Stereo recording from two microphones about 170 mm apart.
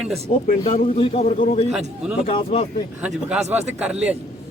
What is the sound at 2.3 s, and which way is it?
Speech, 35° left (ahead or behind).